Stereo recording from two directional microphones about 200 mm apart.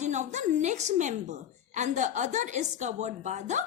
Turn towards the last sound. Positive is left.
turn(degrees=-35)  # may be behind; listen again after turning